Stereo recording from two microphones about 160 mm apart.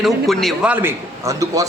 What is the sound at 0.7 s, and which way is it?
Speech, 15° right (ahead or behind).